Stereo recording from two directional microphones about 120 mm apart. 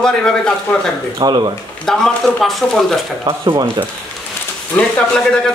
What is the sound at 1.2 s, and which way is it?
Speech, 35° right (ahead or behind).